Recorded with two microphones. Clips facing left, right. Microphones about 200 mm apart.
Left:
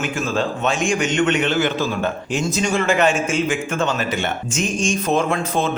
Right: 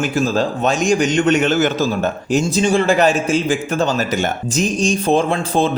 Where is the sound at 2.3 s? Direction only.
30° right (ahead or behind).